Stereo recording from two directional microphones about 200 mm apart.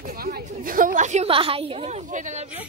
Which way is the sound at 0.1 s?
50° right (ahead or behind).